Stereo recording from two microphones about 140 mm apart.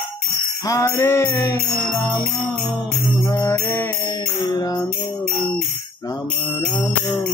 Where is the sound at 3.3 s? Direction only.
20° left (ahead or behind).